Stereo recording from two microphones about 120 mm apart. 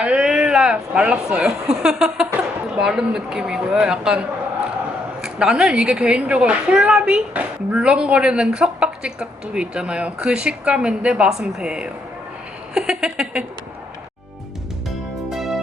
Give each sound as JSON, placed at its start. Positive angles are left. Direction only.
{"t": 0.0, "sound": "a woman's voice", "side_deg": -10}
{"t": 15.3, "sound": "music", "side_deg": -5}